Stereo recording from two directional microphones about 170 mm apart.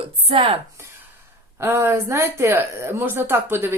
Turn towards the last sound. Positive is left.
turn(degrees=-15)  # may be behind; listen again after turning